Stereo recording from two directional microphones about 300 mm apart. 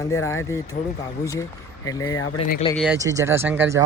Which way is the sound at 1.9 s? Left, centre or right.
Centre.